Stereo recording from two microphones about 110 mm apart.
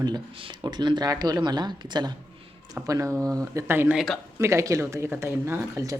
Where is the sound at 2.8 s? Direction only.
30° right (ahead or behind).